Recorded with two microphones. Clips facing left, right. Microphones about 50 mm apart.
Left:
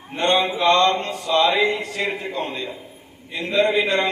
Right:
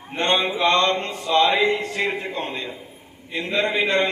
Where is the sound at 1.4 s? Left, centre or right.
Left.